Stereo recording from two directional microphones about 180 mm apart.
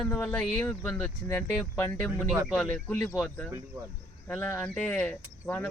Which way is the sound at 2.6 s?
10° left (ahead or behind).